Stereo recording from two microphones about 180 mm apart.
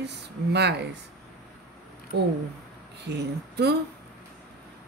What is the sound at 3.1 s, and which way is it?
Speech, 70° right (ahead or behind).